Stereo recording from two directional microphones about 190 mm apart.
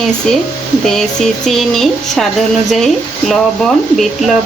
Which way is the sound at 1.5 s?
Centre (ahead or behind).